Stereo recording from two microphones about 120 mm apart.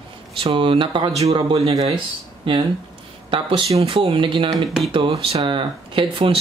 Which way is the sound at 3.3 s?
45° right (ahead or behind).